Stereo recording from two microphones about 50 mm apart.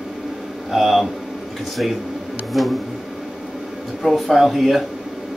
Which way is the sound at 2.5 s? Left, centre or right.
Centre.